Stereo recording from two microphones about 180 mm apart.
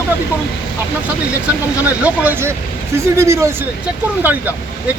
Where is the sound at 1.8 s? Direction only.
10° right (ahead or behind).